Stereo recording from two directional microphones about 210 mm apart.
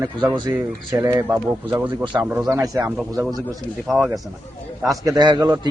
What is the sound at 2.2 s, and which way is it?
Speech, 5° right (ahead or behind).